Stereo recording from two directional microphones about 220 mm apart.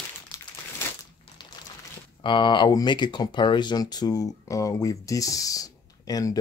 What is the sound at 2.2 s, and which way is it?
Speech, 20° left (ahead or behind).